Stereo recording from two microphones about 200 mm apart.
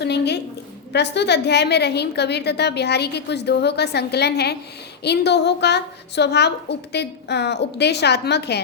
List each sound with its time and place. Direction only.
0.0 s a woman's voice: 55° left (ahead or behind)